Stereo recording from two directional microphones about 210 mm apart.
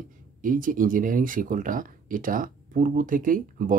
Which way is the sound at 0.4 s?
40° right (ahead or behind).